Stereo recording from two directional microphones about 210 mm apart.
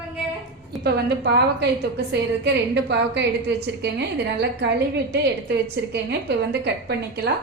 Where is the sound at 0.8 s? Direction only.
50° right (ahead or behind).